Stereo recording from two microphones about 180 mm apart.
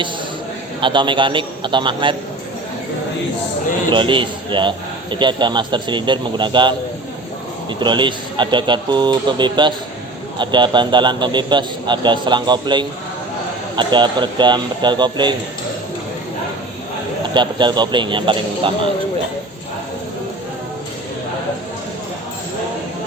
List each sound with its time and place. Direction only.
0.8 s a man's voice: 25° right (ahead or behind)
3.9 s a man's voice: 25° right (ahead or behind)
17.3 s a man's voice: 25° right (ahead or behind)